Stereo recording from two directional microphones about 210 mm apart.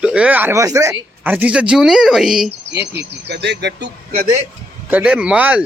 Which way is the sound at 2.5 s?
50° right (ahead or behind).